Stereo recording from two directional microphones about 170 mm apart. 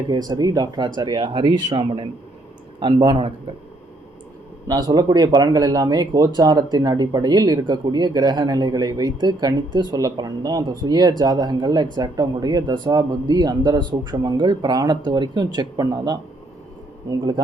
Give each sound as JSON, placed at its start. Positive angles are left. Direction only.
{"t": 0.1, "sound": "speech", "side_deg": -25}
{"t": 4.7, "sound": "speech", "side_deg": -20}